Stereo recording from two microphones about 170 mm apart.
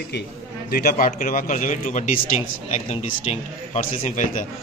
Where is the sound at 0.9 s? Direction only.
50° left (ahead or behind).